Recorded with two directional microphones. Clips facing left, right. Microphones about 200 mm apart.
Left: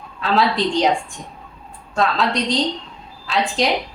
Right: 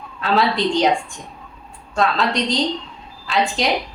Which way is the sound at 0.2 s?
Centre (ahead or behind).